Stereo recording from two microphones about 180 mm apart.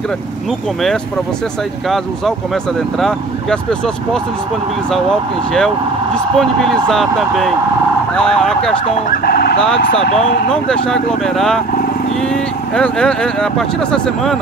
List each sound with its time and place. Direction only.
3.0 s speech: 5° left (ahead or behind)
6.1 s speech: centre (ahead or behind)
9.2 s vehicle: 60° left (ahead or behind)
10.5 s speech: 5° left (ahead or behind)
12.7 s speech: 5° left (ahead or behind)